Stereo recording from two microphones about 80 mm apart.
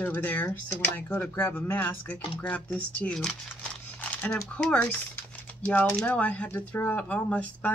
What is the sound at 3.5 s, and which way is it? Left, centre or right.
Crumpling, centre.